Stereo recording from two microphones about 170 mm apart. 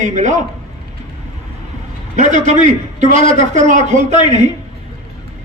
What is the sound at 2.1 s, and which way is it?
A man's voice, 45° right (ahead or behind).